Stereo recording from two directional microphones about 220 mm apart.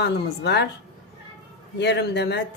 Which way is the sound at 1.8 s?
50° left (ahead or behind).